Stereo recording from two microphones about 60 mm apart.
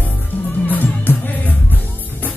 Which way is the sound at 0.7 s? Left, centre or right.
Left.